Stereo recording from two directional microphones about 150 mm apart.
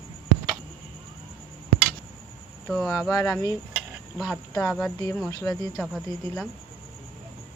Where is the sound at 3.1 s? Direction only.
20° left (ahead or behind).